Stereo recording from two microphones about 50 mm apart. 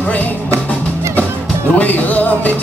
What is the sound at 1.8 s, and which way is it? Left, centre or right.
Music, left.